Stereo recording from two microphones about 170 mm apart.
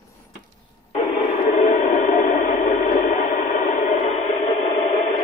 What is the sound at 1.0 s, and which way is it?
Radio, 45° left (ahead or behind).